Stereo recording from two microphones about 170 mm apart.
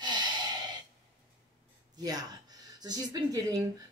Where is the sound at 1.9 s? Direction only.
20° right (ahead or behind).